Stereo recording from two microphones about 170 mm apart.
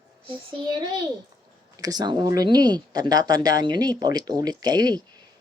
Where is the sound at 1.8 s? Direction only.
25° right (ahead or behind).